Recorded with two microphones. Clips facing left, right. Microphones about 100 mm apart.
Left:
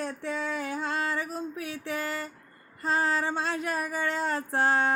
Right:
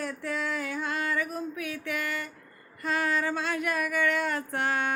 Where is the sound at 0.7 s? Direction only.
30° left (ahead or behind).